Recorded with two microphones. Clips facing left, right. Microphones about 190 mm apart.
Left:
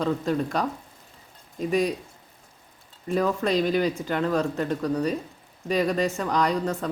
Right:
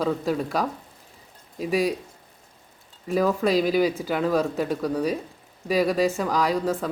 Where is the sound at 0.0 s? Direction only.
5° right (ahead or behind).